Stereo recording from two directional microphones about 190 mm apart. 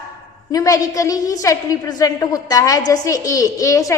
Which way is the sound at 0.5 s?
20° left (ahead or behind).